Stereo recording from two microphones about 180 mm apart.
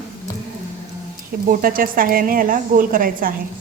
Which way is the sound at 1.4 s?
50° right (ahead or behind).